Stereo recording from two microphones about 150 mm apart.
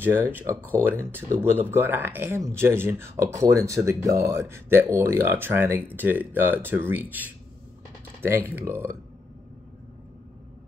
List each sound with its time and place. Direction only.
0.0 s speech: 15° right (ahead or behind)